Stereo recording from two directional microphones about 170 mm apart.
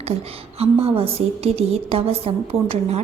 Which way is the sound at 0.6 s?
35° right (ahead or behind).